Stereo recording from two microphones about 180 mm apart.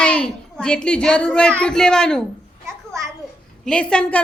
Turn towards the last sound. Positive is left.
turn(degrees=5)  # may be behind; listen again after turning